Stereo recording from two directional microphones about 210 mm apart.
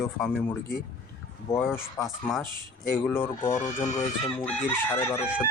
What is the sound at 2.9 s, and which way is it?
Speech, 10° left (ahead or behind).